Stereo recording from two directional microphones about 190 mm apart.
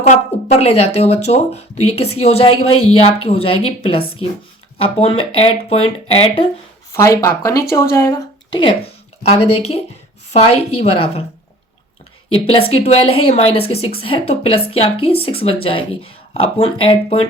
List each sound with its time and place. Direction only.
0.1 s speech: 35° left (ahead or behind)
6.9 s speech: 15° left (ahead or behind)
9.3 s speech: 30° left (ahead or behind)
12.6 s speech: 30° left (ahead or behind)